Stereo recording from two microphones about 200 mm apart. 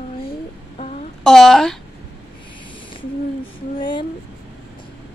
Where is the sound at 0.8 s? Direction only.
35° left (ahead or behind).